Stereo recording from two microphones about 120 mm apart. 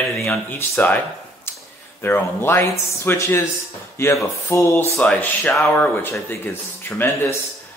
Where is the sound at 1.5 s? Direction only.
20° left (ahead or behind).